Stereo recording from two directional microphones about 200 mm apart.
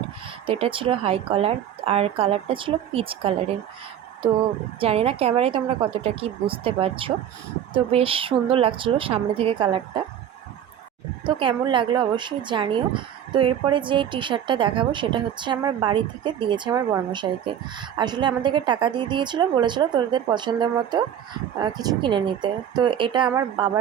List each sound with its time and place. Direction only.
0.4 s a woman's voice: 25° right (ahead or behind)
4.8 s a woman's voice: 30° right (ahead or behind)
11.3 s a woman's voice: 25° right (ahead or behind)